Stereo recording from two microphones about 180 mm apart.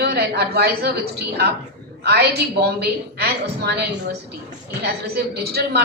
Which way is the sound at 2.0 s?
60° right (ahead or behind).